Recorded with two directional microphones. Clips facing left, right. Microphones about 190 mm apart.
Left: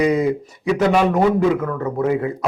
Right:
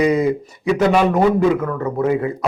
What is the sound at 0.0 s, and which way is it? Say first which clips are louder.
A man's voice: right 1 dB; 10° right (ahead or behind).